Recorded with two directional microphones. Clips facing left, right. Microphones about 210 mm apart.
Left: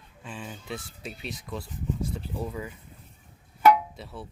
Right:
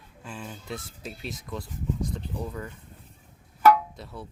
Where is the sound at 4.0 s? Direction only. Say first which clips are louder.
Even; centre (ahead or behind).